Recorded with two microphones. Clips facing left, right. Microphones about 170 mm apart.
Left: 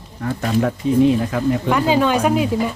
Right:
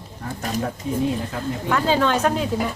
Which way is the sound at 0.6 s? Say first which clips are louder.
Left 9 dB; 85° left.